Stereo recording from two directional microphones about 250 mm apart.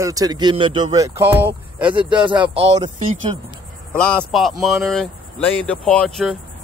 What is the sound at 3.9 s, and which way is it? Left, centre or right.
Speech, centre.